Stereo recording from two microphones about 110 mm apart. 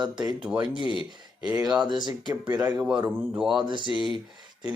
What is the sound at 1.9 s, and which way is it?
Speech, 45° right (ahead or behind).